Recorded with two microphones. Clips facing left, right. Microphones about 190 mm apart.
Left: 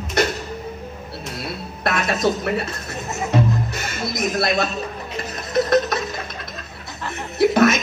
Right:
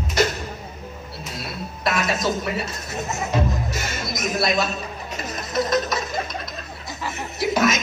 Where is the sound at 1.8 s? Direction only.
60° left (ahead or behind).